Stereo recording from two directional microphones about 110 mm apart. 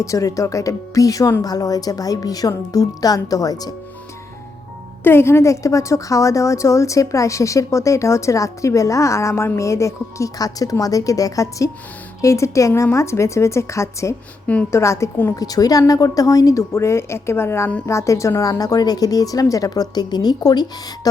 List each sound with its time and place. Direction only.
0.0 s a woman's voice: 30° left (ahead or behind)
5.0 s a woman's voice: 20° left (ahead or behind)